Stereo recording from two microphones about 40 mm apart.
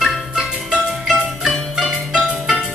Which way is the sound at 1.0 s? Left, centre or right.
Centre.